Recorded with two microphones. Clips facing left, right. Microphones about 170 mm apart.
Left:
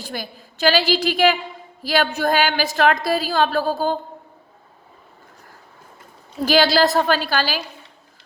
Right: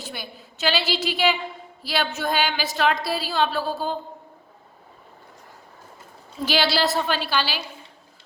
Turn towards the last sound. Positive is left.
turn(degrees=40)  # may be behind; listen again after turning